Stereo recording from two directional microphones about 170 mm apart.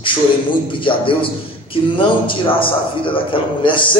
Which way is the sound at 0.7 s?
30° left (ahead or behind).